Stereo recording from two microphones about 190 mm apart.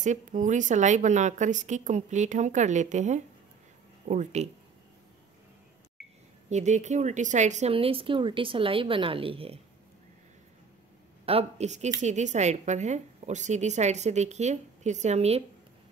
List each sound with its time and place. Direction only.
0.0 s a woman's voice: 40° right (ahead or behind)
6.5 s speech: 40° right (ahead or behind)
11.2 s a woman's voice: 35° right (ahead or behind)